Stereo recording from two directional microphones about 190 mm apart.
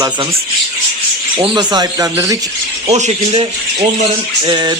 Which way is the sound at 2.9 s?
35° right (ahead or behind).